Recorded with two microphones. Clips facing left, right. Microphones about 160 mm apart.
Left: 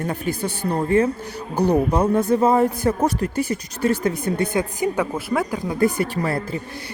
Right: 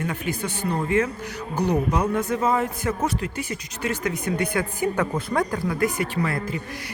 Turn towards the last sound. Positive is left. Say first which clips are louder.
# left 3 dB
turn(degrees=35)  # may be behind; listen again after turning